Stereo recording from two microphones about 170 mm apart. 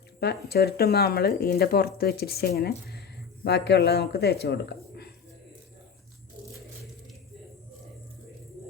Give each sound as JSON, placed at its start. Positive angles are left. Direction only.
{"t": 0.2, "sound": "a man's voice", "side_deg": 75}